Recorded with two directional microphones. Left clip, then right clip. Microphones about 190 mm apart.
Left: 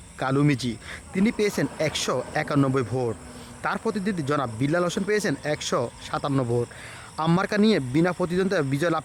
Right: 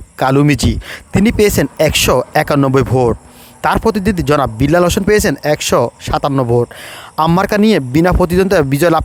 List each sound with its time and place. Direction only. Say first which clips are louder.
0.2 s a man's voice: right 12 dB; 45° right (ahead or behind)